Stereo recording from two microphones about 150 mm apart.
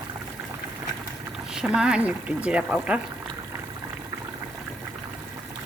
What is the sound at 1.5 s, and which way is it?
Speech, 5° right (ahead or behind).